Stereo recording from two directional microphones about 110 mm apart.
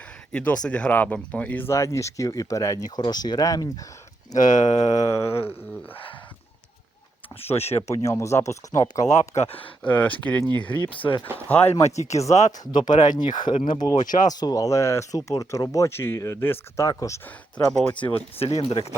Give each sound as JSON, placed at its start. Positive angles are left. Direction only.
{"t": 0.3, "sound": "speech", "side_deg": 10}
{"t": 7.4, "sound": "speech", "side_deg": 70}
{"t": 7.9, "sound": "speech", "side_deg": 25}
{"t": 9.4, "sound": "speech", "side_deg": 60}
{"t": 9.8, "sound": "speech", "side_deg": 15}
{"t": 10.8, "sound": "speech", "side_deg": 50}
{"t": 11.9, "sound": "speech", "side_deg": 90}
{"t": 12.5, "sound": "speech", "side_deg": 40}
{"t": 17.7, "sound": "speech", "side_deg": 10}
{"t": 18.3, "sound": "speech", "side_deg": 65}